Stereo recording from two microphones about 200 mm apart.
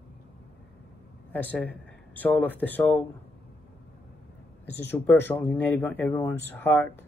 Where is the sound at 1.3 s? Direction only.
10° left (ahead or behind).